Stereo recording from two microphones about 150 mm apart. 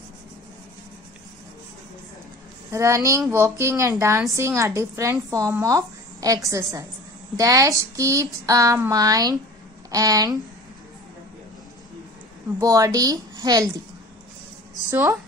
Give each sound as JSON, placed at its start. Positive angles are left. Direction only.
{"t": 2.7, "sound": "speech", "side_deg": -20}
{"t": 12.5, "sound": "speech", "side_deg": -25}
{"t": 14.9, "sound": "speech", "side_deg": -15}